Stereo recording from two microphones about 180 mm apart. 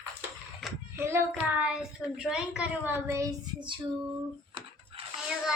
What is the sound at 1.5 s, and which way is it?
A woman's voice, 5° right (ahead or behind).